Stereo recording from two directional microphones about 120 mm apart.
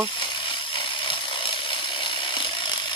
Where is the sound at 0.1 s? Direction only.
45° left (ahead or behind).